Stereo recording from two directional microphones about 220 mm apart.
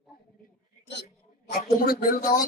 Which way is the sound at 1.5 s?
40° left (ahead or behind).